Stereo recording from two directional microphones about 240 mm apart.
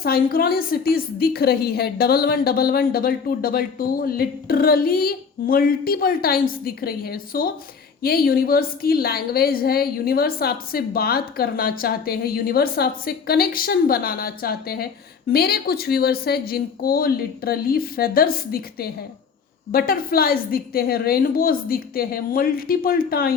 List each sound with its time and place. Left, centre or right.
0.0 s a woman's voice: left